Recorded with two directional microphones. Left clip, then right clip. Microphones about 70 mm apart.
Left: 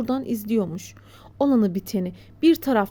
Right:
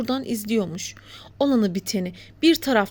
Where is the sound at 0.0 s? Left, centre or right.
Left.